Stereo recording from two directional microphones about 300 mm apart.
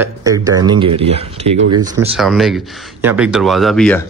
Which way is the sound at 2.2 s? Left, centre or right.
Centre.